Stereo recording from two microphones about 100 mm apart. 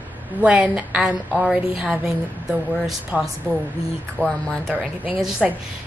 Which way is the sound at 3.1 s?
20° right (ahead or behind).